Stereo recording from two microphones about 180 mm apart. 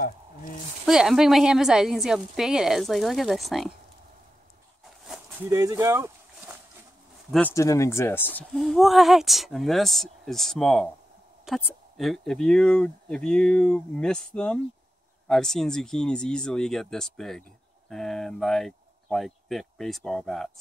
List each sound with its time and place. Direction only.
0.8 s speech: centre (ahead or behind)
5.0 s a sound: 5° right (ahead or behind)
5.5 s speech: 15° right (ahead or behind)
7.2 s speech: 5° left (ahead or behind)
7.5 s speech: 15° left (ahead or behind); by 20.5 s centre (ahead or behind)